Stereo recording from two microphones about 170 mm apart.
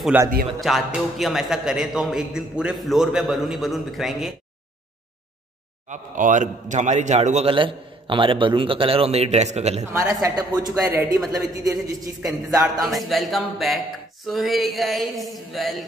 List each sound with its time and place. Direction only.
0.1 s a man's voice: 10° right (ahead or behind)
0.6 s a man's voice: centre (ahead or behind)
5.9 s a man's voice: 50° right (ahead or behind)
10.2 s a woman's voice: 20° right (ahead or behind)
12.8 s a man's voice: centre (ahead or behind)